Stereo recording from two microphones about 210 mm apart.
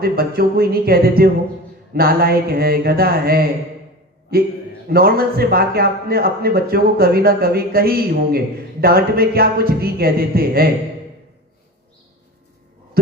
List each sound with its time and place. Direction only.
0.0 s a man's voice: 45° right (ahead or behind)
4.9 s a man's voice: 45° right (ahead or behind)